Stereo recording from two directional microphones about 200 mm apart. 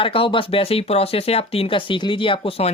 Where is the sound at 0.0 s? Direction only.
25° left (ahead or behind).